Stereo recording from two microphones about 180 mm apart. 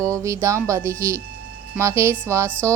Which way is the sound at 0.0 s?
15° right (ahead or behind).